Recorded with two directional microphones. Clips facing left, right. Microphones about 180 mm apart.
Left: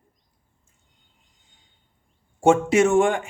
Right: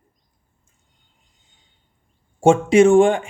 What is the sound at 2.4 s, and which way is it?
Speech, 25° right (ahead or behind).